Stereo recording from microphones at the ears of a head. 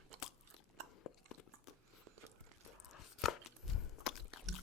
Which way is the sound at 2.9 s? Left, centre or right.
Left.